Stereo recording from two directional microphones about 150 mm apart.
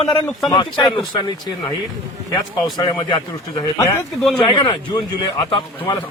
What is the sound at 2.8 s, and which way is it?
A man's voice, 30° left (ahead or behind).